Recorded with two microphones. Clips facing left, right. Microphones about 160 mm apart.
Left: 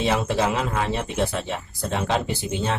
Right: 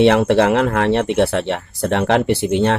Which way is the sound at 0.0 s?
70° right (ahead or behind).